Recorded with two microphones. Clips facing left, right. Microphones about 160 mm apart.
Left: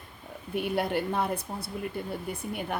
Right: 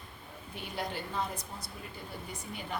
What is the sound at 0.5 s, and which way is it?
Speech, 60° left (ahead or behind).